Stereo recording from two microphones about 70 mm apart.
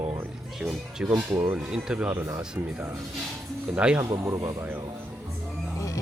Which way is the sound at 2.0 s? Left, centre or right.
Right.